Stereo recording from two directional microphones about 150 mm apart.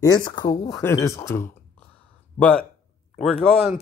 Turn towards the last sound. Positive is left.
turn(degrees=5)  # may be behind; listen again after turning